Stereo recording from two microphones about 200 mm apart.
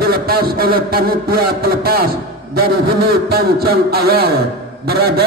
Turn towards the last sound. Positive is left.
turn(degrees=-50)  # may be behind; listen again after turning